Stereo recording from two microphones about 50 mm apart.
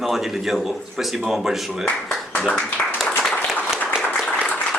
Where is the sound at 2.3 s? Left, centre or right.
Left.